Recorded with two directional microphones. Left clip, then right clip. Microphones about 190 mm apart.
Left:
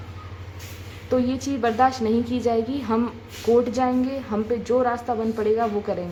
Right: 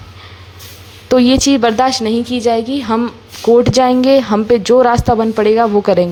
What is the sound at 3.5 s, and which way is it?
Speech, 35° right (ahead or behind).